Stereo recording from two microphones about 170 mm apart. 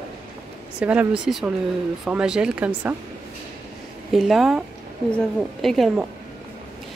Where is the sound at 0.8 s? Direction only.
10° right (ahead or behind).